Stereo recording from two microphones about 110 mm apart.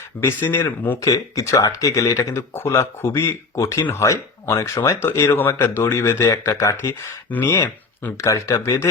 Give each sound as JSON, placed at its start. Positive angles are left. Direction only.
{"t": 0.2, "sound": "speech", "side_deg": 20}
{"t": 1.0, "sound": "speech", "side_deg": 30}